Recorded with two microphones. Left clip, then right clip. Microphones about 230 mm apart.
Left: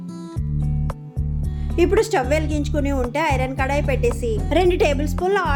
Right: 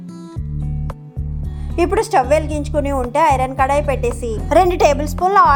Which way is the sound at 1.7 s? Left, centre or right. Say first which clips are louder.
Right 3 dB; centre.